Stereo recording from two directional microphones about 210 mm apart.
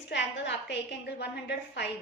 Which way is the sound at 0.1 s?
55° left (ahead or behind).